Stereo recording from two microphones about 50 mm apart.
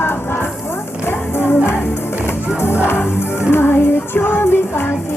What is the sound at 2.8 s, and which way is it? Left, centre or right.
Music, left.